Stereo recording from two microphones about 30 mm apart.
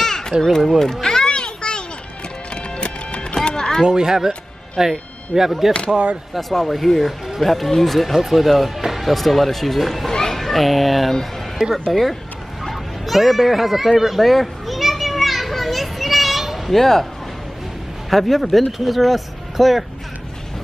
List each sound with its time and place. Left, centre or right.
0.0 s a sound: centre
0.6 s speech: centre
1.0 s children playing: left
2.5 s music: left
3.4 s power windows: left
3.8 s speech: right
5.3 s speech: centre
6.5 s speech: centre
10.1 s children playing: centre
10.4 s speech: centre
13.0 s children playing: centre
16.7 s speech: centre
18.1 s speech: centre